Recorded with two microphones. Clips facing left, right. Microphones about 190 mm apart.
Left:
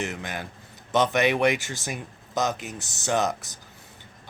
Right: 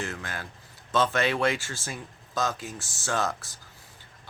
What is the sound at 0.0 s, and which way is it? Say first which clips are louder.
Speech: left 3 dB; 20° left (ahead or behind).